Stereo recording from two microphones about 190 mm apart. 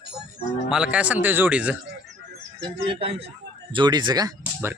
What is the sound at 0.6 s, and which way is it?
Speech, 5° right (ahead or behind).